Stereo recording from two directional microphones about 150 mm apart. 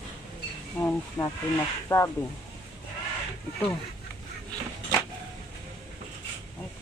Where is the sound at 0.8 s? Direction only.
15° left (ahead or behind).